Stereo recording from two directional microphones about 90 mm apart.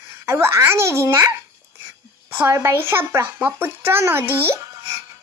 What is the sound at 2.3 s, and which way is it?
Speech, 25° right (ahead or behind).